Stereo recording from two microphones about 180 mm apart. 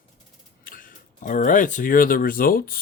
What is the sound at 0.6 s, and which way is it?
Speech, 50° left (ahead or behind).